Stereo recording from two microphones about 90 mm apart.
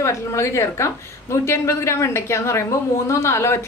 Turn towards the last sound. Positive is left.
turn(degrees=30)  # may be behind; listen again after turning